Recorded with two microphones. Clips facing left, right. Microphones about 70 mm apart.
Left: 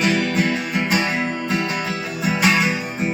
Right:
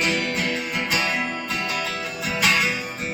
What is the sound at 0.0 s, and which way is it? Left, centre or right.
Music, left.